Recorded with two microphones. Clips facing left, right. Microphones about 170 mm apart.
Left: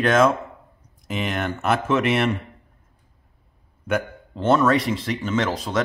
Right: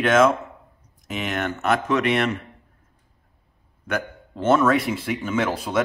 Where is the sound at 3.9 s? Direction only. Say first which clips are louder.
Left 3 dB; 5° right (ahead or behind).